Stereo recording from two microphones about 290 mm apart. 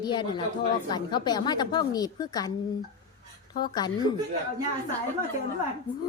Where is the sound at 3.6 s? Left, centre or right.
Centre.